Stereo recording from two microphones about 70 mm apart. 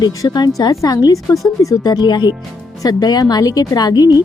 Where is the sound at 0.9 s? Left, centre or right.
Left.